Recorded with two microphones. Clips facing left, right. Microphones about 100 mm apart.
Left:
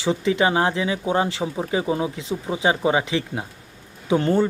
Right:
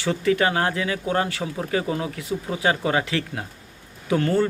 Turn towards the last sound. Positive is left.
turn(degrees=20)  # may be behind; listen again after turning